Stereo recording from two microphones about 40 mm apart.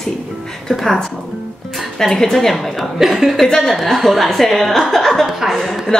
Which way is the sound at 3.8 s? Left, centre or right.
Centre.